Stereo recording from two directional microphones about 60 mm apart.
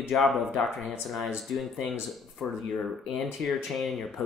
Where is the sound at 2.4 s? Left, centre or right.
Centre.